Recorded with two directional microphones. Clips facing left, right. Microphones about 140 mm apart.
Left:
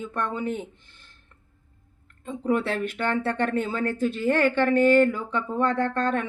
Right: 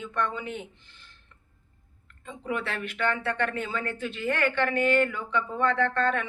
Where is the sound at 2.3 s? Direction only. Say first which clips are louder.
Left 7 dB; 40° left (ahead or behind).